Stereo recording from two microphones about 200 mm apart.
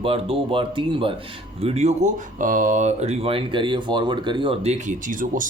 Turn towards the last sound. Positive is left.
turn(degrees=-40)  # may be behind; listen again after turning